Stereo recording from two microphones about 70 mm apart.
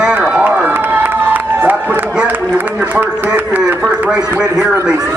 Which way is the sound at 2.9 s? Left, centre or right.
Right.